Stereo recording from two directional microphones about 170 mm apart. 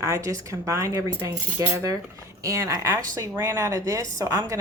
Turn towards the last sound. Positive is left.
turn(degrees=-20)  # may be behind; listen again after turning